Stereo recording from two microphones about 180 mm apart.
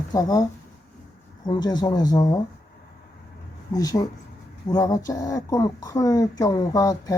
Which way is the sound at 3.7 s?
20° left (ahead or behind).